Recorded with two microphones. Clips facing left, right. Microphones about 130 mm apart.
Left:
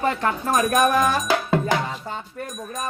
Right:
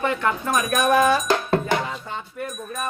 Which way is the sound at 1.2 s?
Centre (ahead or behind).